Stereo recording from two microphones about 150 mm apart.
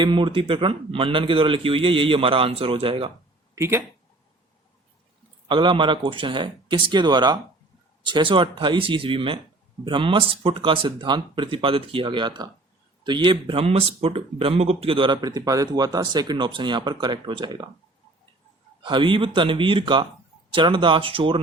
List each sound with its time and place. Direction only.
0.0 s speech: 35° right (ahead or behind)
3.5 s speech: 20° right (ahead or behind)
5.5 s speech: 30° right (ahead or behind)
18.8 s speech: 35° right (ahead or behind)